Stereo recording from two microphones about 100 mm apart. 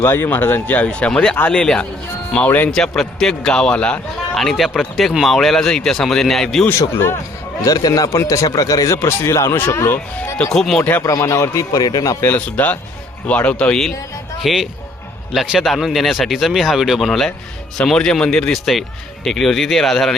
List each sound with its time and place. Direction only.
0.0 s speech: 20° left (ahead or behind)
2.7 s a man's voice: 5° left (ahead or behind)
6.7 s speech: 25° left (ahead or behind)
7.6 s a man's voice: 40° left (ahead or behind)
10.5 s a man's voice: 5° left (ahead or behind)
11.0 s a man's voice: 35° left (ahead or behind)
12.2 s a man's voice: 15° left (ahead or behind)